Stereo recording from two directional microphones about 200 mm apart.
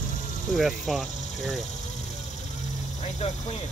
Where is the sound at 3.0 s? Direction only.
35° left (ahead or behind).